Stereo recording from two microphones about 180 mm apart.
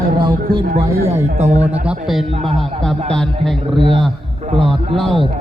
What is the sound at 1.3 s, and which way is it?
Speech, 40° right (ahead or behind).